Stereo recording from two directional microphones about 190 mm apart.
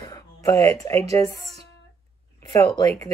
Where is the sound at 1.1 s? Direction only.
15° left (ahead or behind).